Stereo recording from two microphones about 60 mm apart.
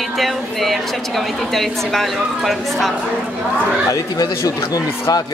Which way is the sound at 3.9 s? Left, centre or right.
Left.